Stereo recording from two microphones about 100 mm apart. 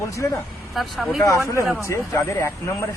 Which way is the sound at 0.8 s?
Centre (ahead or behind).